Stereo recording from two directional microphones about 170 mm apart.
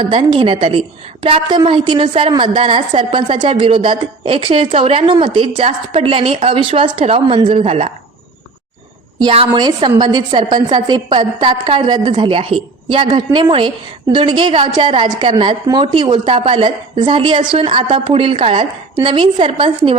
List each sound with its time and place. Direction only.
0.1 s a woman's voice: 30° right (ahead or behind)
9.1 s a woman's voice: 30° right (ahead or behind)